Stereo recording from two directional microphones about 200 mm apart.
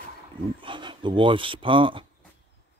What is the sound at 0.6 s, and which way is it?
Speech, 25° right (ahead or behind).